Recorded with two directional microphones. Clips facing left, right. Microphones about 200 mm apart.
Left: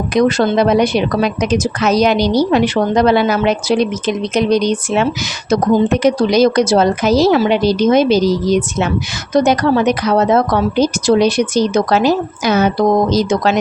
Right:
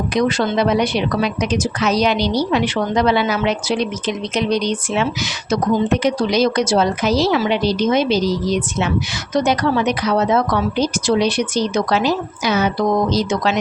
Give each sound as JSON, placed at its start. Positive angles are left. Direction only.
{"t": 0.1, "sound": "a woman's voice", "side_deg": 45}